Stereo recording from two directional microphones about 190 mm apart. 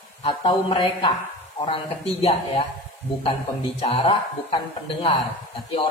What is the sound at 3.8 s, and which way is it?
Speech, 30° left (ahead or behind).